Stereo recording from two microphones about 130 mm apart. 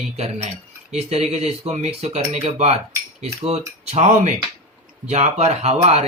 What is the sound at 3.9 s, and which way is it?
Speech, 65° right (ahead or behind).